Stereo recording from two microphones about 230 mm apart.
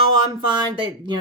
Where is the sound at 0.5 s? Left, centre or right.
Right.